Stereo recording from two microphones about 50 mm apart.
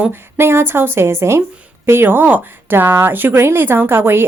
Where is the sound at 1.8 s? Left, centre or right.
Right.